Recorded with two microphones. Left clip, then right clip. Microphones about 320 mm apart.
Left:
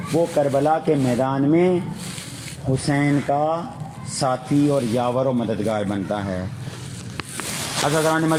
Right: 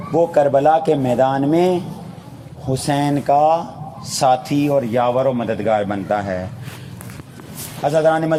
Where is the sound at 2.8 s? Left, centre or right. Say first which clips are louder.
Right 4 dB; right.